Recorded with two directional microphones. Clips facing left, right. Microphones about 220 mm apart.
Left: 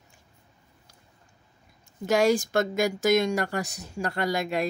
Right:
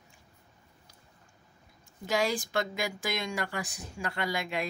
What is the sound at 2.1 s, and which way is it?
Speech, 45° left (ahead or behind).